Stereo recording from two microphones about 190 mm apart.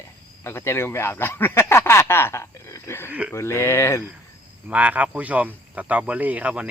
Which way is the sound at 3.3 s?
15° left (ahead or behind).